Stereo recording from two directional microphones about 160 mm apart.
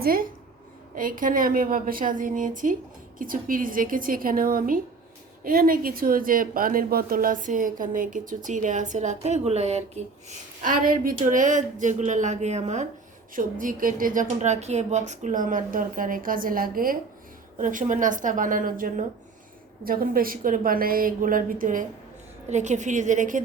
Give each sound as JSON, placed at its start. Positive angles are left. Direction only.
{"t": 0.0, "sound": "a woman's voice", "side_deg": -65}
{"t": 13.3, "sound": "a woman's voice", "side_deg": -55}
{"t": 22.4, "sound": "a woman's voice", "side_deg": -45}